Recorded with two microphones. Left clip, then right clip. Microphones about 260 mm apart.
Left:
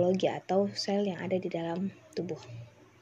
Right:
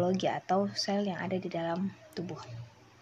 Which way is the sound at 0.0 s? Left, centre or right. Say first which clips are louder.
Left 2 dB; right.